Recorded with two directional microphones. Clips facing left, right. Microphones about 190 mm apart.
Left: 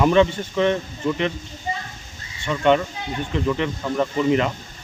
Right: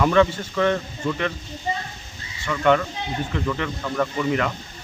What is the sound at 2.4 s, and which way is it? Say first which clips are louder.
Speech: left 1 dB; 20° left (ahead or behind).